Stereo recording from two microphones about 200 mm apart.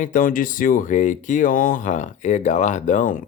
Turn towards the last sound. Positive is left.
turn(degrees=45)  # may be behind; listen again after turning